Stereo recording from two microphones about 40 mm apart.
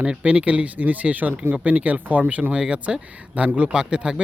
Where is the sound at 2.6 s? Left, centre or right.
Right.